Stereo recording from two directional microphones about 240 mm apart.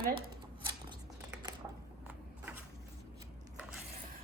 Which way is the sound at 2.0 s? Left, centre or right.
Centre.